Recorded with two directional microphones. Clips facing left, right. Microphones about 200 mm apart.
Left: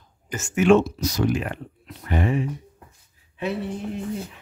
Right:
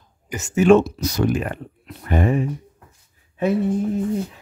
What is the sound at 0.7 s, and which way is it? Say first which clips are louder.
Speech: right 2 dB; 60° right (ahead or behind).